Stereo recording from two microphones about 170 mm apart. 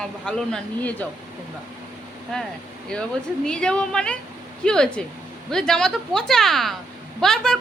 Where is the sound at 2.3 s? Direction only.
5° left (ahead or behind).